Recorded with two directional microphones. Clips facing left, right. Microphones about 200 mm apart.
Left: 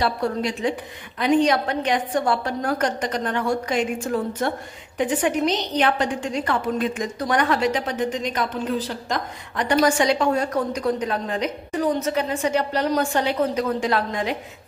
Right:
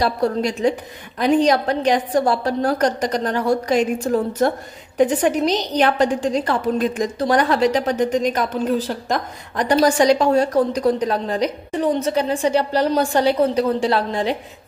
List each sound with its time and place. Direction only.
0.0 s a woman's voice: 40° right (ahead or behind)